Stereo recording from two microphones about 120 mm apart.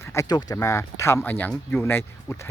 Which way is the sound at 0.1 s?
30° left (ahead or behind).